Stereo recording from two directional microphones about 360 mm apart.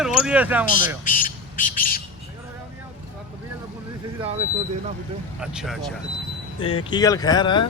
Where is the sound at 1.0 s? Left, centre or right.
Left.